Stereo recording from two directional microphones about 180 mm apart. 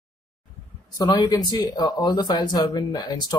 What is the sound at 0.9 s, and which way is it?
Speech, 20° left (ahead or behind).